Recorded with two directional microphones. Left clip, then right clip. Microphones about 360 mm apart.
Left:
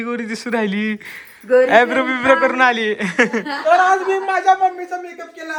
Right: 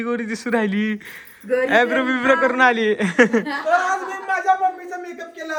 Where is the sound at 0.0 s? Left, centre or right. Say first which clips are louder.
Even; centre.